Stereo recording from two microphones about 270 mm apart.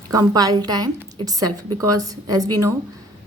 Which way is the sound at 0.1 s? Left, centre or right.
Centre.